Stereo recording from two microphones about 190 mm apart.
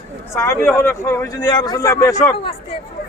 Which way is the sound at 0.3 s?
15° left (ahead or behind).